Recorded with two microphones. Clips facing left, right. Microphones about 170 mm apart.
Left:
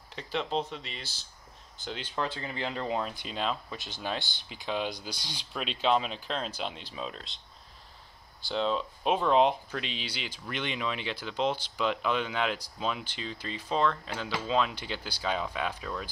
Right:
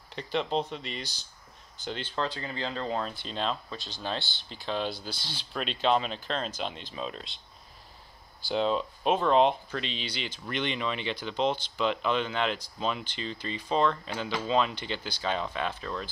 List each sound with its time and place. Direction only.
0.1 s speech: centre (ahead or behind)
2.4 s speech: 15° left (ahead or behind); by 7.3 s centre (ahead or behind)
8.5 s speech: 5° right (ahead or behind)